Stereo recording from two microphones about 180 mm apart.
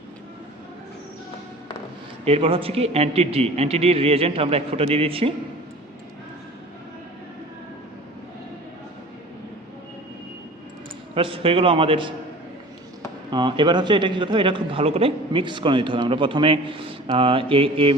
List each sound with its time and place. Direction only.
2.2 s a man's voice: 30° right (ahead or behind)
11.1 s a man's voice: 30° right (ahead or behind)
13.3 s a man's voice: 25° right (ahead or behind)